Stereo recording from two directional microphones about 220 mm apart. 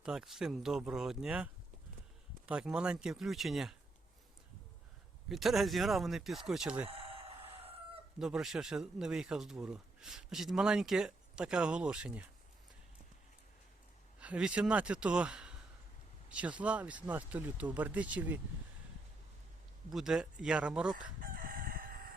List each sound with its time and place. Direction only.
0.0 s speech: 5° right (ahead or behind)
2.5 s speech: 5° right (ahead or behind)
5.3 s speech: centre (ahead or behind)
6.8 s a sound: 25° right (ahead or behind)
8.2 s speech: centre (ahead or behind)
14.2 s speech: 5° right (ahead or behind)
19.9 s speech: centre (ahead or behind)
20.9 s crowing: 40° right (ahead or behind)